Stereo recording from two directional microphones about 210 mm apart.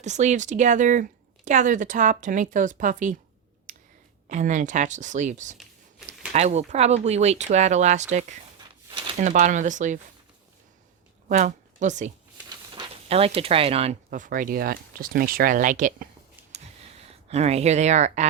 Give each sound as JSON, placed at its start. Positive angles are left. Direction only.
{"t": 0.0, "sound": "speech", "side_deg": -35}
{"t": 3.7, "sound": "a sound", "side_deg": -35}
{"t": 4.3, "sound": "speech", "side_deg": -35}
{"t": 11.3, "sound": "speech", "side_deg": -35}
{"t": 12.5, "sound": "speech", "side_deg": -20}
{"t": 17.1, "sound": "speech", "side_deg": -30}